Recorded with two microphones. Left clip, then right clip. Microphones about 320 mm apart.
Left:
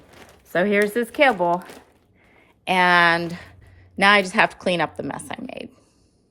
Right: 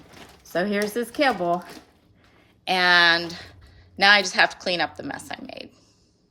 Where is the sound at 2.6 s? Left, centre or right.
Centre.